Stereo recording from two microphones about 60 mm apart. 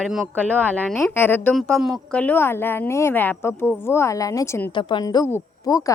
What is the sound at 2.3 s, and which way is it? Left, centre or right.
Speech, left.